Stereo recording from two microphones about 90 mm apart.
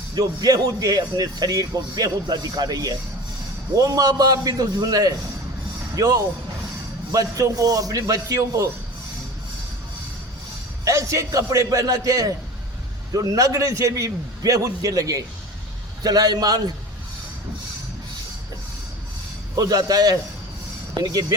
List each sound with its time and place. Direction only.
0.1 s a man's voice: 45° right (ahead or behind)
10.8 s a man's voice: 35° right (ahead or behind)
19.5 s a man's voice: 45° right (ahead or behind)